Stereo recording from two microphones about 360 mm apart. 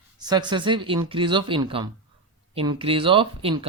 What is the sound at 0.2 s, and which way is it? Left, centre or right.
Speech, centre.